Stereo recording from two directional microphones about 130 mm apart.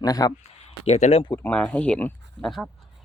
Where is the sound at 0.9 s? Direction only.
60° left (ahead or behind).